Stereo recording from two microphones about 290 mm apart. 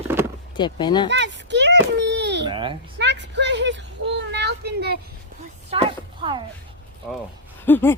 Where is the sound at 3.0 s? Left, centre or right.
Right.